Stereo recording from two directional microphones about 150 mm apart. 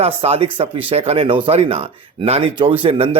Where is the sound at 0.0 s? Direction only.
40° right (ahead or behind).